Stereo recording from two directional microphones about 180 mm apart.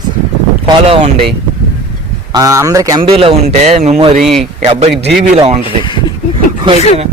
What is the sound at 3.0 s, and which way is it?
Speech, 30° right (ahead or behind).